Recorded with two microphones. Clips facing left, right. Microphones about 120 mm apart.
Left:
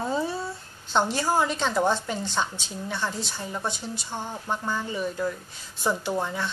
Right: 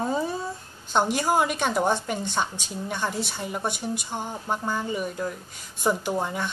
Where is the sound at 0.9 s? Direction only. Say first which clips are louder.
Right 1 dB; 15° right (ahead or behind).